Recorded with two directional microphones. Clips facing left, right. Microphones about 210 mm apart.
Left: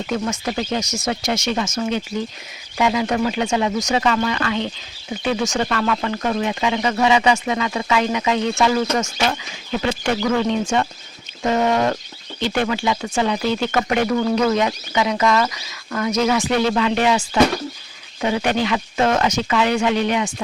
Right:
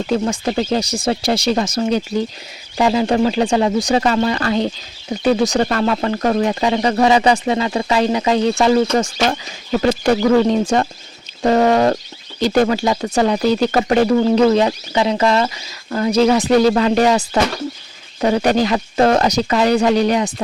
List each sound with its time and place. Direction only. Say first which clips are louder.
0.1 s speech: right 5 dB; 30° right (ahead or behind)